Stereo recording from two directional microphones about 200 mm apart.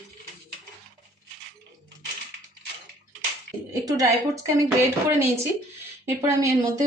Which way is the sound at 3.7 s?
15° right (ahead or behind).